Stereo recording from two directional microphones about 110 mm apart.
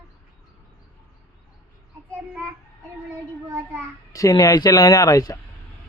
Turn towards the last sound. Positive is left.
turn(degrees=30)  # may be behind; listen again after turning